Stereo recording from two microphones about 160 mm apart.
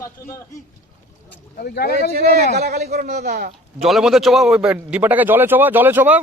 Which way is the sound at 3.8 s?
Centre (ahead or behind).